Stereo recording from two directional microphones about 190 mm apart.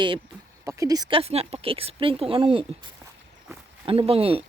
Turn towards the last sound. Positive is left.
turn(degrees=-30)  # may be behind; listen again after turning